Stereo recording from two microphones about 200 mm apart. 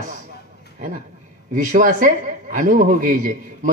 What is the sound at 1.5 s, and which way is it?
A man's voice, 40° right (ahead or behind).